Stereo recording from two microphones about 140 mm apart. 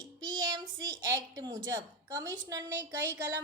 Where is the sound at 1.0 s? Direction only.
20° right (ahead or behind).